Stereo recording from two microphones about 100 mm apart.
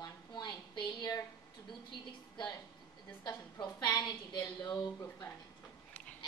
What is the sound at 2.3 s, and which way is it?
A woman's voice, 45° left (ahead or behind).